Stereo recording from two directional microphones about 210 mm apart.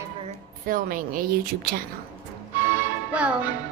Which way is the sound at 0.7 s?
40° right (ahead or behind).